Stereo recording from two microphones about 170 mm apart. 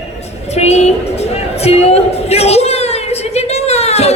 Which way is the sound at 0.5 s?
40° left (ahead or behind).